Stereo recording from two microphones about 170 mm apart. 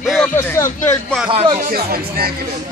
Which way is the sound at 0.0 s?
Centre (ahead or behind).